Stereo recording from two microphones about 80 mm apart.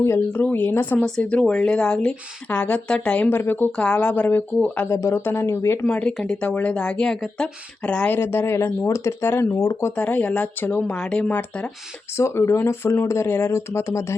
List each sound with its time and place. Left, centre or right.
0.3 s speech: left
0.9 s speech: centre
3.2 s speech: left
4.9 s speech: left
5.8 s speech: centre
8.1 s speech: left
9.6 s speech: left
9.9 s speech: centre
10.8 s speech: centre
12.1 s speech: left